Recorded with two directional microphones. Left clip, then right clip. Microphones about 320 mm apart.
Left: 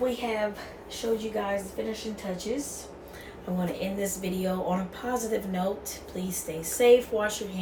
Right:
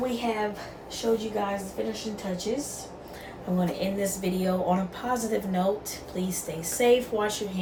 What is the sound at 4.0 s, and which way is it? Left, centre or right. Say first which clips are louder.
Speech: right 2 dB; centre.